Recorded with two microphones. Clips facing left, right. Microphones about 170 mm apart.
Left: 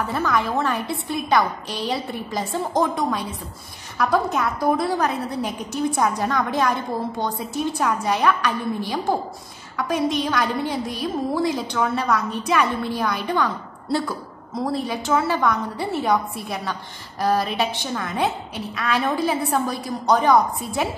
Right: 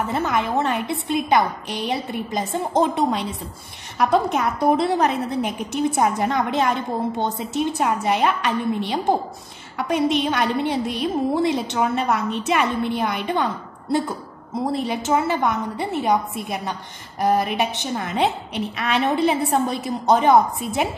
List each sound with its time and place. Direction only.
0.0 s a woman's voice: 20° right (ahead or behind)
14.6 s a woman's voice: 20° right (ahead or behind)